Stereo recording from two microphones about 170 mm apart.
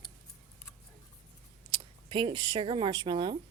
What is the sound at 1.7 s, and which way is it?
Speech, 30° right (ahead or behind).